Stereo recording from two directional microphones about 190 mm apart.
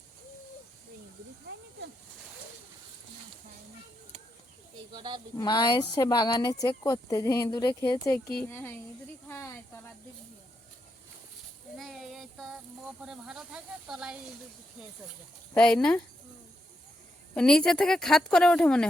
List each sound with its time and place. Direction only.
4.9 s speech: 20° right (ahead or behind)
5.4 s speech: 20° left (ahead or behind)
9.3 s snake: 15° left (ahead or behind)
11.8 s child singing: centre (ahead or behind)
13.0 s speech: 5° right (ahead or behind)
15.5 s speech: 5° left (ahead or behind)
17.3 s speech: 5° left (ahead or behind)